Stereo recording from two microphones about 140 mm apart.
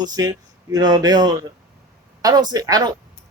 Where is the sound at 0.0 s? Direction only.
30° right (ahead or behind).